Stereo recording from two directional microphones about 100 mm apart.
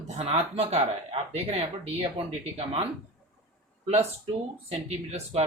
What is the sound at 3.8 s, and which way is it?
Speech, 90° right.